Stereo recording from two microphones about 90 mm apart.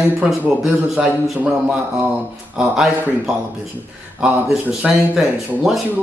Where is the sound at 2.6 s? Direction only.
5° right (ahead or behind).